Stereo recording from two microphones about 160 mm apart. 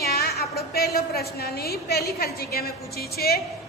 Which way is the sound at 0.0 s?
75° left (ahead or behind).